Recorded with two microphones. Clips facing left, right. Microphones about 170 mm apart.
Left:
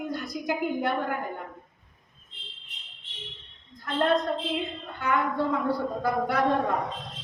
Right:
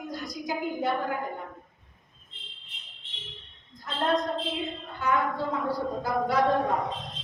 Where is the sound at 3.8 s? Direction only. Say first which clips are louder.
Left 3 dB; 60° left (ahead or behind).